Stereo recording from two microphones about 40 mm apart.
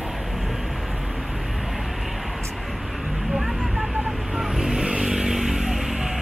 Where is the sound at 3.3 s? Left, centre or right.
Centre.